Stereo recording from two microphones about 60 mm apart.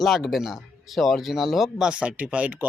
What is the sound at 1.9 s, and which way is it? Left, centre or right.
Speech, centre.